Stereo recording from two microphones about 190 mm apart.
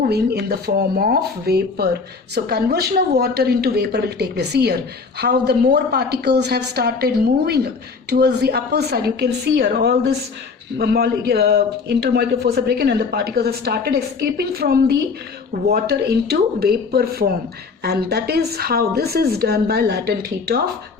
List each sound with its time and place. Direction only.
0.0 s a man's voice: 55° right (ahead or behind)